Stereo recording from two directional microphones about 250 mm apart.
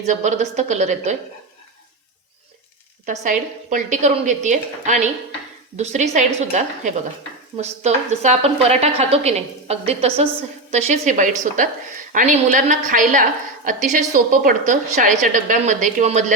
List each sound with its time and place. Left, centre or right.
0.0 s a woman's voice: right
3.1 s a woman's voice: right